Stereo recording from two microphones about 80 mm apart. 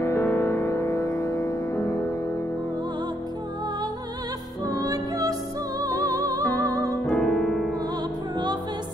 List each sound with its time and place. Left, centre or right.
0.0 s music: left
4.6 s music: right
7.1 s piano: centre